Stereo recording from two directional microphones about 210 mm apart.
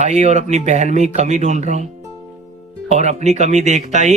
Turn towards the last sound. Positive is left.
turn(degrees=-35)  # may be behind; listen again after turning